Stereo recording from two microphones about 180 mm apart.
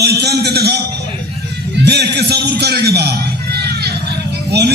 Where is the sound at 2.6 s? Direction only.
65° right (ahead or behind).